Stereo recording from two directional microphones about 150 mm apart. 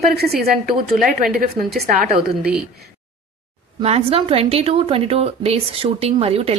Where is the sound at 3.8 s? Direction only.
45° right (ahead or behind).